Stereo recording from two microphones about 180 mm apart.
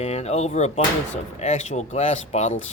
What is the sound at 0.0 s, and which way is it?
Speech, 35° left (ahead or behind).